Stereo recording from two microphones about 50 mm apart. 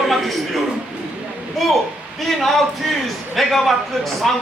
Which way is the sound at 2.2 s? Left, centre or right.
Centre.